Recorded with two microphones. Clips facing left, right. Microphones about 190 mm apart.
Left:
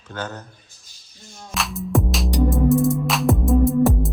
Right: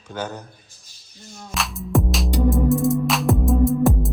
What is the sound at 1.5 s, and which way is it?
Music, centre (ahead or behind).